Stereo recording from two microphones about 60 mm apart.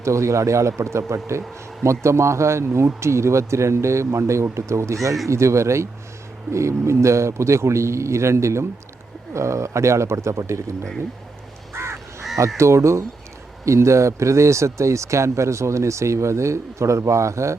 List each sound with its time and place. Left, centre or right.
0.0 s speech: right
11.7 s crow: right
12.5 s speech: right